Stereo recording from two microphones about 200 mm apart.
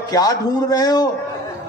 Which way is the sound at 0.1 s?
20° left (ahead or behind).